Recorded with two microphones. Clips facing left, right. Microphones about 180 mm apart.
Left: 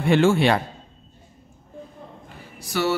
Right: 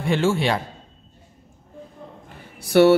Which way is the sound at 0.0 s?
65° left (ahead or behind).